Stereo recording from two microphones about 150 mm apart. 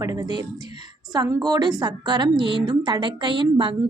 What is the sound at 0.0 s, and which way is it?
A woman's voice, 25° right (ahead or behind).